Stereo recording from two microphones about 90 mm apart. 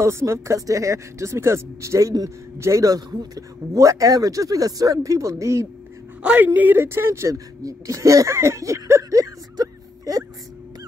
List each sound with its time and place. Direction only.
0.0 s speech: 30° right (ahead or behind)
6.2 s speech: 20° right (ahead or behind); by 10.2 s 40° right (ahead or behind)